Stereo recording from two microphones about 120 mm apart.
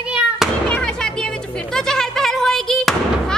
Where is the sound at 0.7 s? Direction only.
10° left (ahead or behind).